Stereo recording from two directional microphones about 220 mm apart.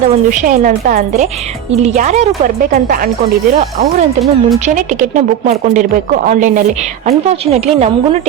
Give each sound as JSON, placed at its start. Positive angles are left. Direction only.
{"t": 0.3, "sound": "a woman's voice", "side_deg": -35}
{"t": 4.2, "sound": "speech", "side_deg": 0}
{"t": 4.6, "sound": "a woman's voice", "side_deg": -35}